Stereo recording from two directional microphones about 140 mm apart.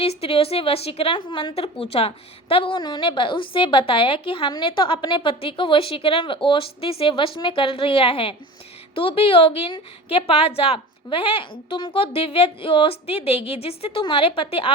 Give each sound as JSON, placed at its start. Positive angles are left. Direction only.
{"t": 0.0, "sound": "a woman's voice", "side_deg": 45}